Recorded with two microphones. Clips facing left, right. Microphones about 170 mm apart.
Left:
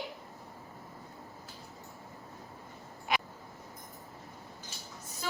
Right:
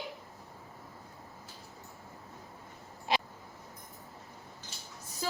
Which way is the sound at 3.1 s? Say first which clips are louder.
Right 1 dB; 30° right (ahead or behind).